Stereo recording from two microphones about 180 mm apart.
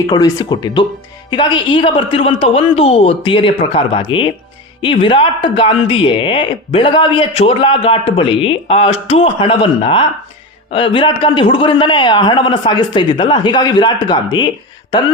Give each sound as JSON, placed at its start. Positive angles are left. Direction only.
{"t": 0.1, "sound": "speech", "side_deg": 20}